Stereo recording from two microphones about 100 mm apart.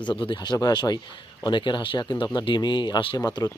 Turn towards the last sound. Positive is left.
turn(degrees=40)  # may be behind; listen again after turning